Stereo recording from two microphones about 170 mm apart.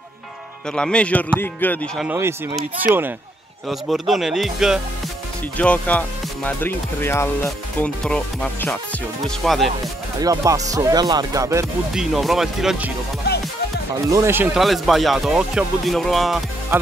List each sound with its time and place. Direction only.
0.7 s speech: 5° left (ahead or behind)
2.1 s speech: 15° right (ahead or behind)
3.6 s speech: centre (ahead or behind)
5.6 s speech: 10° left (ahead or behind)
8.0 s speech: 5° left (ahead or behind)
10.2 s music: 20° right (ahead or behind)
11.9 s speech: centre (ahead or behind)
14.0 s speech: 15° right (ahead or behind)
14.6 s speech: centre (ahead or behind)
16.7 s speech: 15° right (ahead or behind)